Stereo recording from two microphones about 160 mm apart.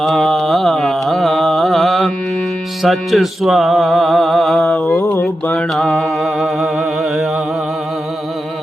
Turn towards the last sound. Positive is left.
turn(degrees=0)  # may be behind; listen again after turning